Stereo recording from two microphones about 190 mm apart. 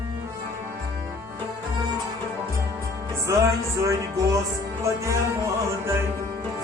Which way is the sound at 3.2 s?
15° right (ahead or behind).